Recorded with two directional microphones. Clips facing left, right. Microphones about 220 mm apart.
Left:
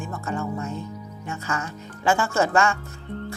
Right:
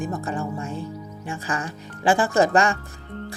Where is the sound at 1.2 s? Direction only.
15° right (ahead or behind).